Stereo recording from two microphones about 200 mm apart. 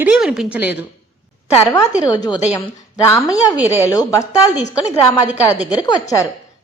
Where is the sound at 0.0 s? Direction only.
5° right (ahead or behind).